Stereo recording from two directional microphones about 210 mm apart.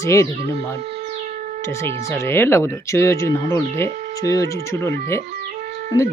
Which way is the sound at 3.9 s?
35° right (ahead or behind).